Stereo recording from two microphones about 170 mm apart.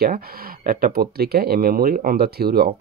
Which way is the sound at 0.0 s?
60° right (ahead or behind).